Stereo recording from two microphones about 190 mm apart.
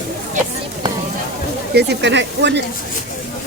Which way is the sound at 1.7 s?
65° right (ahead or behind).